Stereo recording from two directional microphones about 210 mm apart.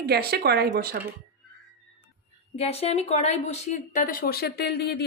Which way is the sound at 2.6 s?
30° left (ahead or behind).